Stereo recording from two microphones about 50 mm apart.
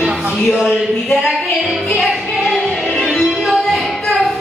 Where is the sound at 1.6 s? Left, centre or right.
Centre.